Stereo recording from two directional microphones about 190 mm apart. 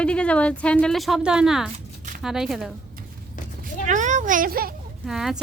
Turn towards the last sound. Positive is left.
turn(degrees=0)  # may be behind; listen again after turning